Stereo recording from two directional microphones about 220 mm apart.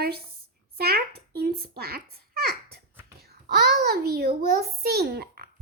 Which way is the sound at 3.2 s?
45° right (ahead or behind).